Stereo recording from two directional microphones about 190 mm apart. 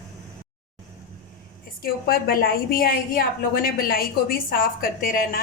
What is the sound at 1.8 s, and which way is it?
A woman's voice, 50° left (ahead or behind).